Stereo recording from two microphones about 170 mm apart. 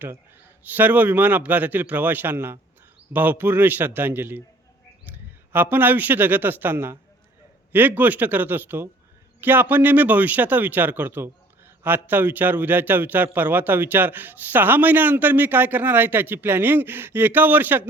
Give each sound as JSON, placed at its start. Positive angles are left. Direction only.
{"t": 0.7, "sound": "a man's voice", "side_deg": -10}
{"t": 5.1, "sound": "a sound", "side_deg": -10}
{"t": 5.7, "sound": "a man's voice", "side_deg": -10}